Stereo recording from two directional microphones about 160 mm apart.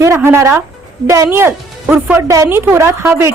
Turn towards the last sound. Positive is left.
turn(degrees=-15)  # may be behind; listen again after turning